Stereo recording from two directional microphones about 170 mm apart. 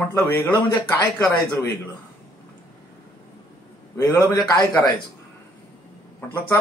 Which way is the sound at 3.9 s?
20° left (ahead or behind).